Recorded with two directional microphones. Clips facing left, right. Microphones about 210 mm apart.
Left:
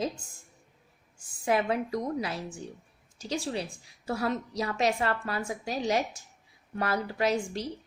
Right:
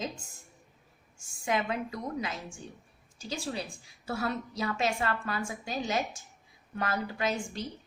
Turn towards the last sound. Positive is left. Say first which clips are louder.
# left 4 dB
turn(degrees=35)  # may be behind; listen again after turning